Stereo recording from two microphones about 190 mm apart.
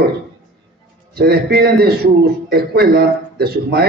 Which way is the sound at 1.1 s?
55° right (ahead or behind).